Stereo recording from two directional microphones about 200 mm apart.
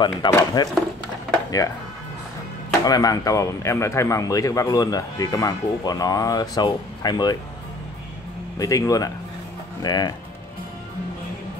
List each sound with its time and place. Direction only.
0.0 s speech: 20° left (ahead or behind)
2.8 s speech: 20° left (ahead or behind)
8.5 s speech: 15° left (ahead or behind)